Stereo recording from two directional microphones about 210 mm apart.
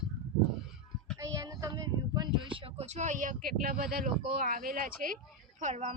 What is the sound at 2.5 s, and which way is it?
Speech, 25° right (ahead or behind).